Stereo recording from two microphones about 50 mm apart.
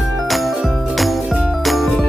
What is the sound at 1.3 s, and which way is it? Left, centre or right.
Music, centre.